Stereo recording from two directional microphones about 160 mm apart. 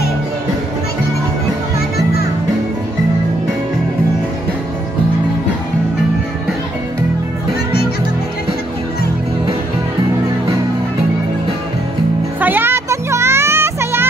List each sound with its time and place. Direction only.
12.4 s music: 10° right (ahead or behind)